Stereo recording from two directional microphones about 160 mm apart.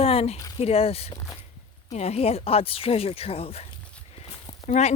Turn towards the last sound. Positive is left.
turn(degrees=45)  # may be behind; listen again after turning